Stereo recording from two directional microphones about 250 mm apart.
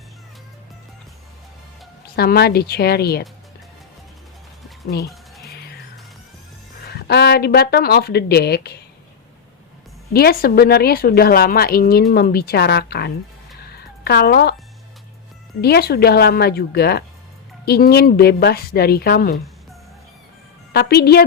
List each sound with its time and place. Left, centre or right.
2.1 s a woman's voice: left
6.8 s a woman's voice: left
10.1 s a woman's voice: left
13.7 s a sound: left
15.6 s a woman's voice: left
20.7 s a woman's voice: left